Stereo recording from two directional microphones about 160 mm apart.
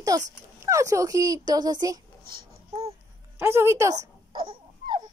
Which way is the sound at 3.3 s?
15° right (ahead or behind).